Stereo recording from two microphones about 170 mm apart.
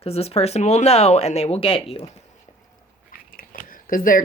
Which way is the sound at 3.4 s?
55° left (ahead or behind).